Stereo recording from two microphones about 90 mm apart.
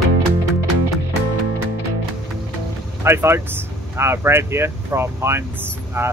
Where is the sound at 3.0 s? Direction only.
30° right (ahead or behind).